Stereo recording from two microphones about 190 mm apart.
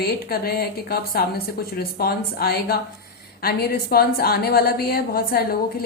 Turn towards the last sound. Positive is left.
turn(degrees=55)  # may be behind; listen again after turning